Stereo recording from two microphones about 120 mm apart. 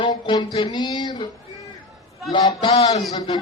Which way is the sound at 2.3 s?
40° left (ahead or behind).